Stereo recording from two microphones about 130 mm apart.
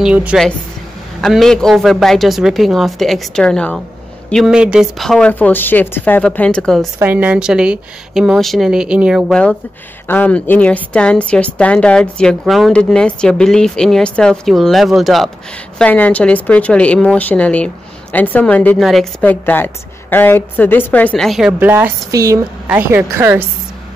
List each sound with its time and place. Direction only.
0.0 s speech: 10° right (ahead or behind)
1.2 s a woman's voice: centre (ahead or behind)
5.3 s a woman's voice: 15° left (ahead or behind)
7.0 s a woman's voice: 15° right (ahead or behind)
9.3 s a woman's voice: 5° left (ahead or behind)
15.8 s a woman's voice: 10° left (ahead or behind)
19.2 s a woman's voice: 15° left (ahead or behind); by 21.5 s centre (ahead or behind)
21.5 s speech: 15° right (ahead or behind)